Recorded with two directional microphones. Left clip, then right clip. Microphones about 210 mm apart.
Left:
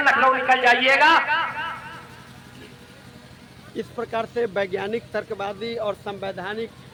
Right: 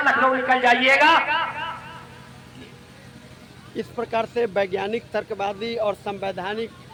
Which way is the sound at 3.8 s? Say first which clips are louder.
Right 2 dB; 10° right (ahead or behind).